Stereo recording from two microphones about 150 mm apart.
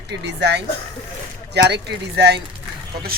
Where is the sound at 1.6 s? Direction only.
90° right.